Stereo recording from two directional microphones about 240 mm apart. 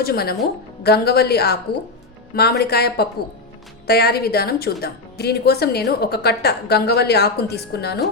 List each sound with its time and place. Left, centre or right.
0.0 s a woman's voice: left